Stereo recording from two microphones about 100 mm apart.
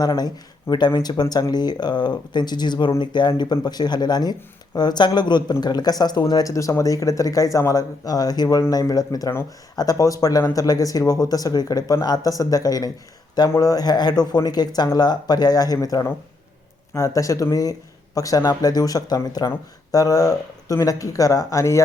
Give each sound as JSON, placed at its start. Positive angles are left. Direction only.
{"t": 0.0, "sound": "speech", "side_deg": 45}